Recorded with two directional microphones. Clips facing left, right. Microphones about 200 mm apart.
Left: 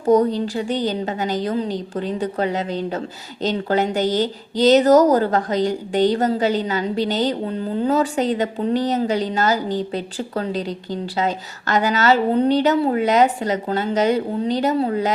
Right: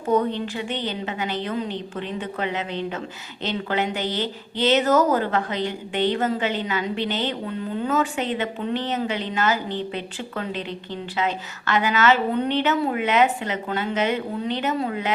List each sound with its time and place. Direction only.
0.0 s speech: 35° left (ahead or behind)